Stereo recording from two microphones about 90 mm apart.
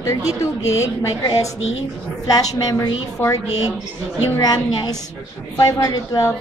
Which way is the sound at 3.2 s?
35° left (ahead or behind).